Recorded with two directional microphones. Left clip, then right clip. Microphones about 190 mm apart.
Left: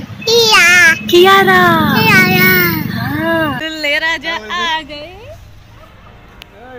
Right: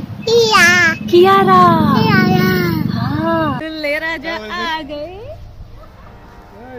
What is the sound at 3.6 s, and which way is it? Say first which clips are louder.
Speech: left 4 dB; 10° right (ahead or behind).